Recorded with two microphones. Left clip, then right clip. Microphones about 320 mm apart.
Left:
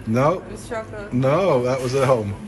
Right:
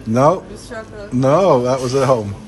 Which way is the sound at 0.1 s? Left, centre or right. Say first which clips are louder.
Right 6 dB; centre.